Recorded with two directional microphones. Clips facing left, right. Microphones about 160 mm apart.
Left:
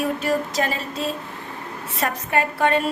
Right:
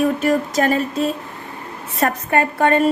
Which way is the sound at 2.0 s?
50° right (ahead or behind).